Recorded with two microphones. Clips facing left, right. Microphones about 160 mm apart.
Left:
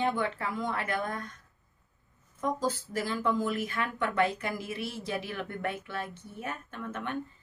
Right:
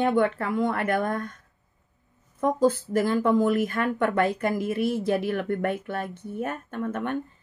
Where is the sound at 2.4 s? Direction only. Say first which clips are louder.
Right 9 dB; 55° right (ahead or behind).